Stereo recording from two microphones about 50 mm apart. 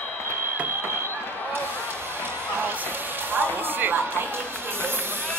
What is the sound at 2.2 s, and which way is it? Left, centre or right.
Music, right.